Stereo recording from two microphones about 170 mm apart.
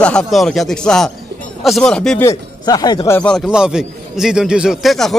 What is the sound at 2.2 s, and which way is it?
Speech, 20° left (ahead or behind).